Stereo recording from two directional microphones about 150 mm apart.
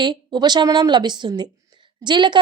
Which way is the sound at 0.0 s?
30° right (ahead or behind).